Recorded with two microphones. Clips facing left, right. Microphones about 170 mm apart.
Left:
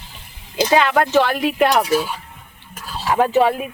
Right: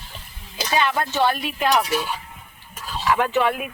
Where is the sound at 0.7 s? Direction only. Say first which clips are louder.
Left 7 dB; 80° left.